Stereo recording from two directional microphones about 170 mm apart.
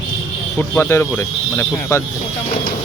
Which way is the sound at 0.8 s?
15° left (ahead or behind).